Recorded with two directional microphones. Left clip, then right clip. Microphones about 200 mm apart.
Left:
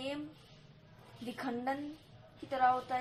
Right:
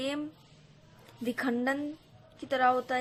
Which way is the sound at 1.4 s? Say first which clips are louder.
Right 6 dB; 45° right (ahead or behind).